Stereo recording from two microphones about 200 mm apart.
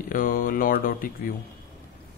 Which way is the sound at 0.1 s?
45° left (ahead or behind).